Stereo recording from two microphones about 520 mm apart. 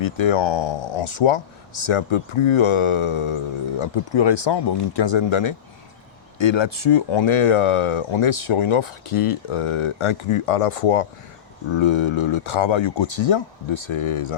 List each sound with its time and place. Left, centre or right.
0.0 s speech: left
3.8 s speech: left
11.7 s speech: left